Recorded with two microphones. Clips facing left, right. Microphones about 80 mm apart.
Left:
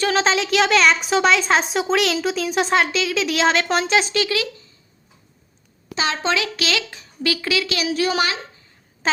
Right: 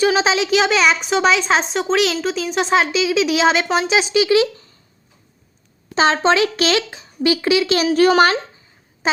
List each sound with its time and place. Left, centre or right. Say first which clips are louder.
0.0 s a woman's voice: right 3 dB; centre
5.9 s a child's voice: right 7 dB; right
6.9 s a child's voice: right 6 dB; right
9.0 s a sound: right 1 dB; centre